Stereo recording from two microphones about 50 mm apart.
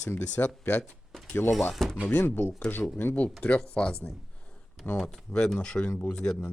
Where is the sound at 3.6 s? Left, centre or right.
Left.